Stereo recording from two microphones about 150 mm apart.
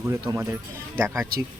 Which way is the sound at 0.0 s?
20° right (ahead or behind).